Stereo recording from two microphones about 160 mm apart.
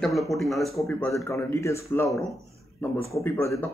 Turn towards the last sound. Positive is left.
turn(degrees=15)  # may be behind; listen again after turning